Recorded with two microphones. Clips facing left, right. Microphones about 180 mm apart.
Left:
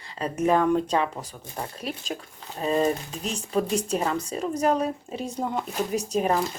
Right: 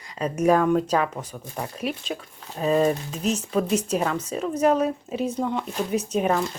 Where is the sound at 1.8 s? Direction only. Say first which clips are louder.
Right 5 dB; 40° left (ahead or behind).